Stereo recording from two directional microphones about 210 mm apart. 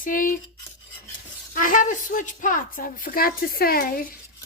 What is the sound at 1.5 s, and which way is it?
A woman's voice, 40° left (ahead or behind).